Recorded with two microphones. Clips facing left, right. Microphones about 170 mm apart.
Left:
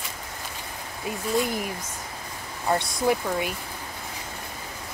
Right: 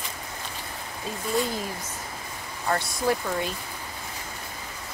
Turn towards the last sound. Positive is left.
turn(degrees=15)  # may be behind; listen again after turning